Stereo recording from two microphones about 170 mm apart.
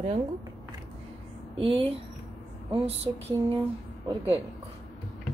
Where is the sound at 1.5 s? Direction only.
35° right (ahead or behind).